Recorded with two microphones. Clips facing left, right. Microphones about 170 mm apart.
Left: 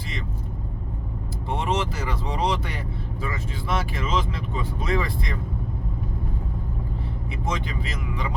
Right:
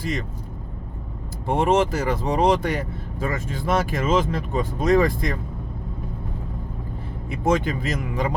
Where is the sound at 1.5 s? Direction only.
50° right (ahead or behind).